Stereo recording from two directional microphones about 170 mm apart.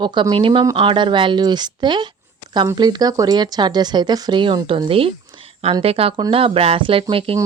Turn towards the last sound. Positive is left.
turn(degrees=-30)  # may be behind; listen again after turning